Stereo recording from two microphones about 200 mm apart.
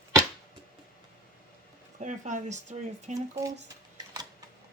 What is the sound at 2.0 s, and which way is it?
Speech, 40° right (ahead or behind).